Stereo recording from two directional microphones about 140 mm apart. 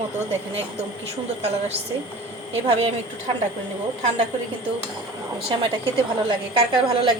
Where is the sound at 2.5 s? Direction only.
50° right (ahead or behind).